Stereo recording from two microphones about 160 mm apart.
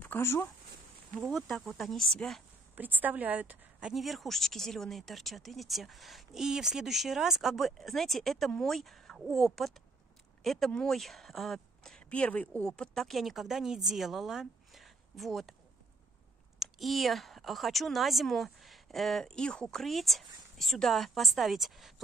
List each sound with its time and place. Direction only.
0.0 s speech: 15° left (ahead or behind)
1.2 s speech: centre (ahead or behind)
2.7 s speech: 10° right (ahead or behind)
16.5 s speech: centre (ahead or behind)